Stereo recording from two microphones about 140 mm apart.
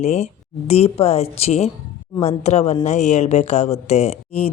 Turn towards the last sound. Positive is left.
turn(degrees=45)  # may be behind; listen again after turning